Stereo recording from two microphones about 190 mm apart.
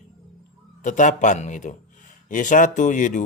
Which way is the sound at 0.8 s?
40° left (ahead or behind).